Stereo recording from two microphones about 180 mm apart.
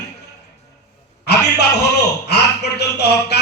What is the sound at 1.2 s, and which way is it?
A man's voice, 65° left (ahead or behind).